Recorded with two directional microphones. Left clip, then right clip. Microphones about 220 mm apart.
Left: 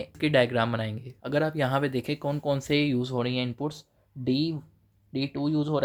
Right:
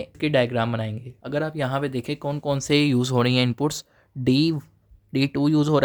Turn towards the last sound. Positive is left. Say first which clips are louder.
# right 7 dB
turn(degrees=-35)  # may be behind; listen again after turning